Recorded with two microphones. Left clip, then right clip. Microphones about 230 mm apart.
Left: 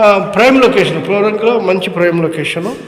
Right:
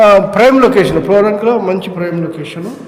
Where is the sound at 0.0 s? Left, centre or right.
Centre.